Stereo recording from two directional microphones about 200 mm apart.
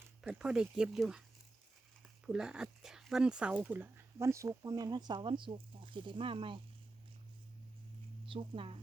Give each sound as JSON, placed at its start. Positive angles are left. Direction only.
{"t": 0.2, "sound": "speech", "side_deg": -5}
{"t": 2.2, "sound": "speech", "side_deg": -5}
{"t": 8.3, "sound": "a woman's voice", "side_deg": -25}